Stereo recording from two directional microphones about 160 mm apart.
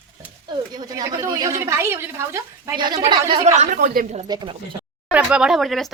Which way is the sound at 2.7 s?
25° right (ahead or behind).